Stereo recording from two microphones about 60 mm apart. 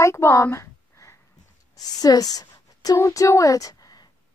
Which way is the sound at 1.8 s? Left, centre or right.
Left.